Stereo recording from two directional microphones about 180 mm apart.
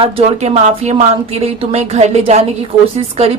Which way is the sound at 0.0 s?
35° right (ahead or behind).